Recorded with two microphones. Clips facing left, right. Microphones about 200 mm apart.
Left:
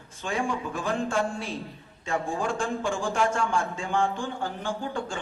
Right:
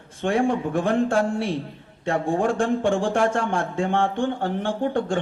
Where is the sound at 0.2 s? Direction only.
60° right (ahead or behind).